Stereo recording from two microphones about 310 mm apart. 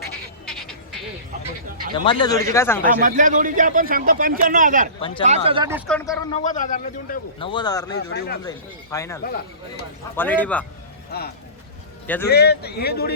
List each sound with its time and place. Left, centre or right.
0.4 s frog: centre
1.9 s a man's voice: centre
2.8 s speech: right
4.9 s a man's voice: centre
5.2 s speech: centre
5.9 s speech: centre
6.5 s a man's voice: left
7.9 s a man's voice: left
8.4 s a man's voice: centre
12.0 s speech: centre
12.3 s a man's voice: left